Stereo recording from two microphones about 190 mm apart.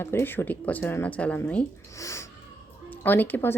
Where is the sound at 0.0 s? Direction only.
10° left (ahead or behind).